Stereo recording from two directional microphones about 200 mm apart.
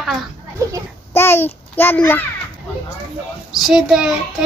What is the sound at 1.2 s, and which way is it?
A child's voice, 10° left (ahead or behind).